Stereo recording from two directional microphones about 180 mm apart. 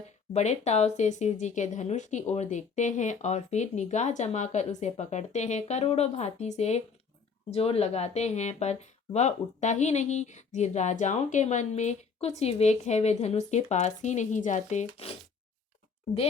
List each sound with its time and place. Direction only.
0.3 s speech: 40° left (ahead or behind)